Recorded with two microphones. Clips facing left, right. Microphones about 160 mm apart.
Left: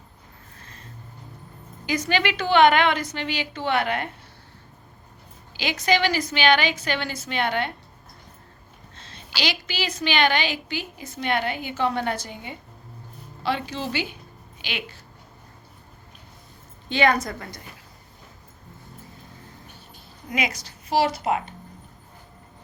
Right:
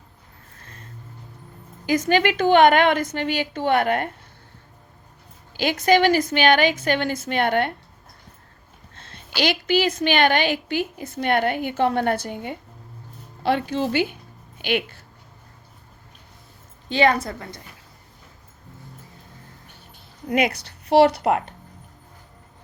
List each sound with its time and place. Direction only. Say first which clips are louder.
1.9 s a woman's voice: right 5 dB; 45° right (ahead or behind)
5.5 s a woman's voice: right 5 dB; 50° right (ahead or behind)
9.0 s a woman's voice: right 6 dB; 55° right (ahead or behind)
16.9 s a woman's voice: right 2 dB; 30° right (ahead or behind)
20.3 s a woman's voice: right 6 dB; 60° right (ahead or behind)